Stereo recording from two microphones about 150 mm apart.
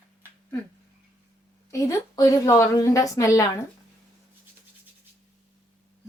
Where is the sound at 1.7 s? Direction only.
20° left (ahead or behind).